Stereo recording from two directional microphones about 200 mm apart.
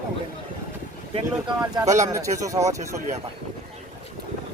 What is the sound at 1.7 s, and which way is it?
Speech, 15° right (ahead or behind).